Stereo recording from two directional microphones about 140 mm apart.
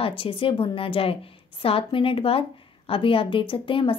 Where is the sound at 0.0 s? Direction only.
40° left (ahead or behind).